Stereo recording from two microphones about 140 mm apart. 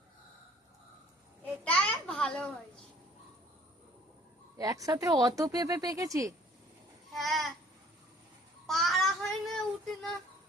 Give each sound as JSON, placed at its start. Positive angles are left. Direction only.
{"t": 1.6, "sound": "a sound", "side_deg": 10}
{"t": 4.5, "sound": "speech", "side_deg": -25}
{"t": 7.1, "sound": "babbling", "side_deg": 0}
{"t": 8.6, "sound": "child singing", "side_deg": 0}